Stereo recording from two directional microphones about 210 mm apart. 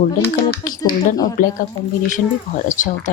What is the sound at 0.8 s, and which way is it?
Speech, 15° left (ahead or behind).